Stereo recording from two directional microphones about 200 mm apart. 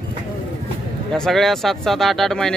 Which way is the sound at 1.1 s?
Centre (ahead or behind).